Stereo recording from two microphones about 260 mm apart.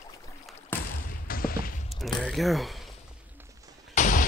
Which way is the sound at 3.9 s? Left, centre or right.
Left.